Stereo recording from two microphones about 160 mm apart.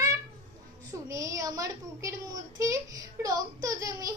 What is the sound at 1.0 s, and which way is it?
A child's voice, 20° right (ahead or behind).